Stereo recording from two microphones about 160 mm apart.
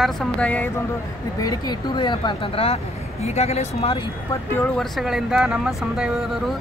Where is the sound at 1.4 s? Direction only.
25° left (ahead or behind).